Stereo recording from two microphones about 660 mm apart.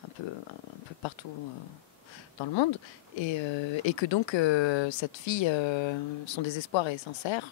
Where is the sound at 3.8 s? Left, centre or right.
Left.